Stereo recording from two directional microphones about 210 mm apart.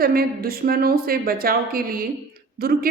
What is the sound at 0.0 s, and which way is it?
A woman's voice, 45° right (ahead or behind).